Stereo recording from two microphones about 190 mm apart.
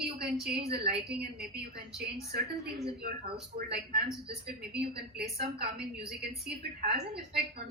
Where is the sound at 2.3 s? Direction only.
55° right (ahead or behind).